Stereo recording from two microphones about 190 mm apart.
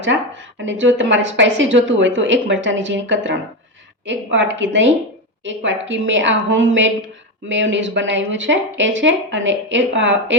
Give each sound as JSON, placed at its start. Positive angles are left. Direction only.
{"t": 0.6, "sound": "speech", "side_deg": -75}